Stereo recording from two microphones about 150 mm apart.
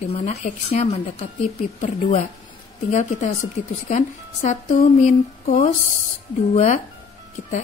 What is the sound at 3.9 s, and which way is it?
A woman's voice, 55° left (ahead or behind).